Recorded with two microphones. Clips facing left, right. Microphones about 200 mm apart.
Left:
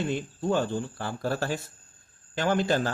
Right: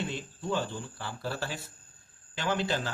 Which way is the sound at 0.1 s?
50° left (ahead or behind).